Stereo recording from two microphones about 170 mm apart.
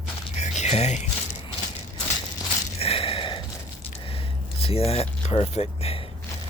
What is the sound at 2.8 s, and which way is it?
Gasp, 35° left (ahead or behind).